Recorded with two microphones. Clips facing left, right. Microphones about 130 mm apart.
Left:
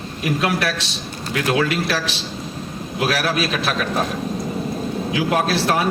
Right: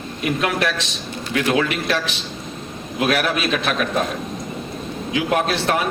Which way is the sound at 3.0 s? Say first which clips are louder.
Right 1 dB; 35° left (ahead or behind).